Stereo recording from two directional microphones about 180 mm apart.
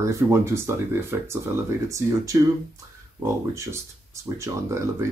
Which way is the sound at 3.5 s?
15° right (ahead or behind).